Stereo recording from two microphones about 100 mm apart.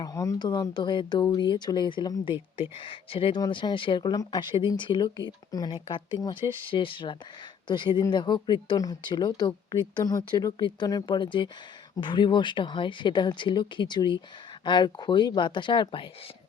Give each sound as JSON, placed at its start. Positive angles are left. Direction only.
{"t": 0.0, "sound": "speech", "side_deg": 35}
{"t": 2.2, "sound": "speech", "side_deg": 60}
{"t": 4.1, "sound": "speech", "side_deg": 40}
{"t": 5.7, "sound": "speech", "side_deg": 60}
{"t": 11.2, "sound": "speech", "side_deg": 55}